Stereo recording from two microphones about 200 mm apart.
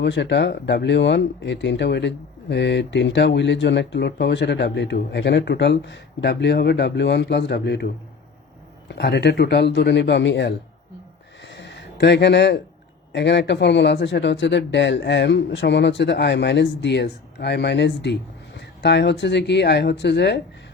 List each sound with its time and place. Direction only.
0.0 s speech: 60° left (ahead or behind)
8.9 s speech: 55° left (ahead or behind)
11.4 s a sound: 60° left (ahead or behind)
13.1 s speech: 60° left (ahead or behind)